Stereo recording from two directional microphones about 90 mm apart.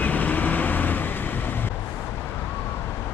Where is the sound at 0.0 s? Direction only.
20° left (ahead or behind).